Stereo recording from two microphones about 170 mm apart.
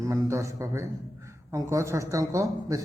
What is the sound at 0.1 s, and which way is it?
A man's voice, 15° right (ahead or behind).